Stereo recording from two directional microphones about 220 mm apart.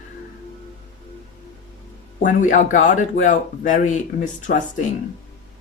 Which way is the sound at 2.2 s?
35° left (ahead or behind).